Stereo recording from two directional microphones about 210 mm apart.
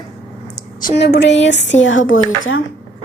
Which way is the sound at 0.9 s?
55° left (ahead or behind).